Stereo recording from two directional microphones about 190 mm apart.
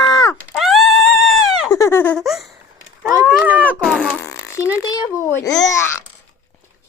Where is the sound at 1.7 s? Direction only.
15° left (ahead or behind); by 2.5 s centre (ahead or behind).